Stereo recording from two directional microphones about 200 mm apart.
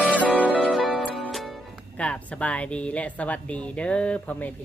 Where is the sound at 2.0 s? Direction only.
5° left (ahead or behind).